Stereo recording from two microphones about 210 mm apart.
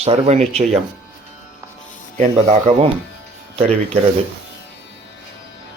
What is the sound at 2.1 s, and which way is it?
Speech, 35° right (ahead or behind).